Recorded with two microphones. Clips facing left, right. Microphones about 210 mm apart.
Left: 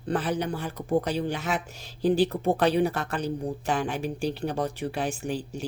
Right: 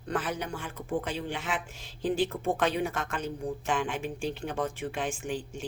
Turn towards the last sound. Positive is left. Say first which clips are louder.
# left 3 dB
turn(degrees=40)  # may be behind; listen again after turning